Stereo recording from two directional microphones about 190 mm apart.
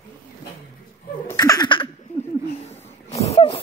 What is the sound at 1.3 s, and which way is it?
Laughter, 20° left (ahead or behind).